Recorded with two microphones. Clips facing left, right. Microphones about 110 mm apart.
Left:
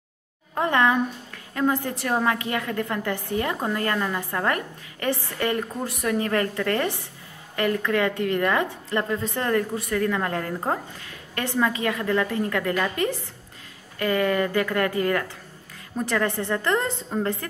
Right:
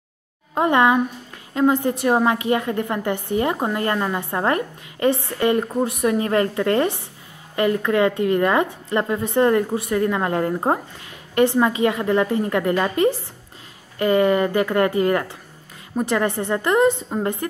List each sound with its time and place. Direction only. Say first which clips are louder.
0.6 s a woman's voice: right 4 dB; 20° right (ahead or behind)